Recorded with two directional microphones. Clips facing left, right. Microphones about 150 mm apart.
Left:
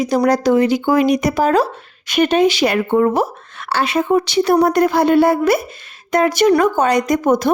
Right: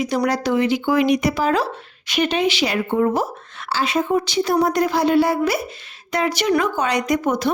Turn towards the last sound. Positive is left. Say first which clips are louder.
# left 5 dB
turn(degrees=45)  # may be behind; listen again after turning